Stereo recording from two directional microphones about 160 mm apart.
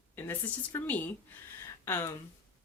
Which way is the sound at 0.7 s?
10° left (ahead or behind).